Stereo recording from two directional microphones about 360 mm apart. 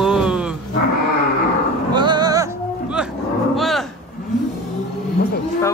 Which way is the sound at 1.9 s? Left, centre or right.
Centre.